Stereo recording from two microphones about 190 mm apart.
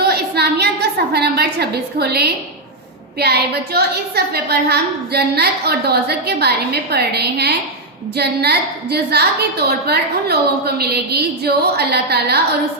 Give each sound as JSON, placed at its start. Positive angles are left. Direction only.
{"t": 0.0, "sound": "a woman's voice", "side_deg": -55}